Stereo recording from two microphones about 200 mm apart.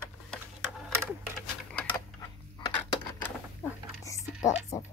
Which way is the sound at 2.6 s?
20° left (ahead or behind).